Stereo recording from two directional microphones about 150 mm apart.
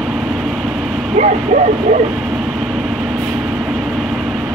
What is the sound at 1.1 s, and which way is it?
Speech, 50° right (ahead or behind).